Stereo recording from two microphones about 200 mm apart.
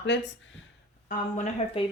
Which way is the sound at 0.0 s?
60° left (ahead or behind).